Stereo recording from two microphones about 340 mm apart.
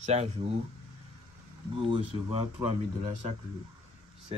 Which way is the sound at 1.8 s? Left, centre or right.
Centre.